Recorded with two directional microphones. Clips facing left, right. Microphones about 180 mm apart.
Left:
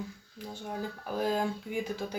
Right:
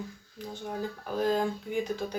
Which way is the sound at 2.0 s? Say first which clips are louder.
Right 2 dB; 5° right (ahead or behind).